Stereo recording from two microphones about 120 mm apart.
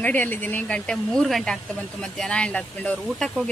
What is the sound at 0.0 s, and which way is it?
Speech, 15° left (ahead or behind).